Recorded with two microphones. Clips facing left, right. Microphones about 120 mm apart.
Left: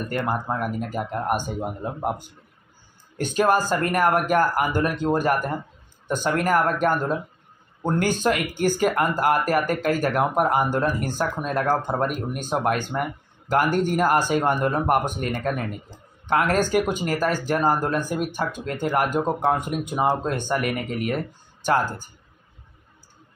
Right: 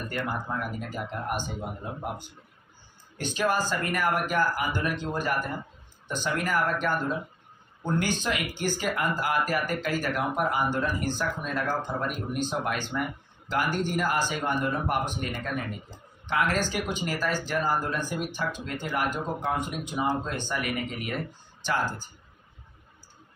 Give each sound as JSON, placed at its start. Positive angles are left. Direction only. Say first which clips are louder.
{"t": 0.1, "sound": "speech", "louder": "left 6 dB", "side_deg": 45}
{"t": 3.2, "sound": "speech", "louder": "left 6 dB", "side_deg": 45}